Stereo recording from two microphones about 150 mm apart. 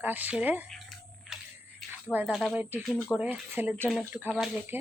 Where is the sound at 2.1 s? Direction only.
10° right (ahead or behind).